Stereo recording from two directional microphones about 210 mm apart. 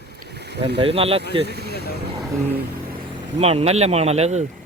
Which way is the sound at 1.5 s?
50° right (ahead or behind).